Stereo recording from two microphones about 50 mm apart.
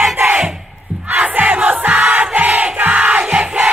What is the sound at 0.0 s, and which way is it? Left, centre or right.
Crowd, centre.